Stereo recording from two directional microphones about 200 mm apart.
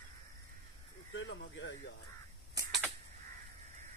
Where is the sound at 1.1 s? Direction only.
65° left (ahead or behind).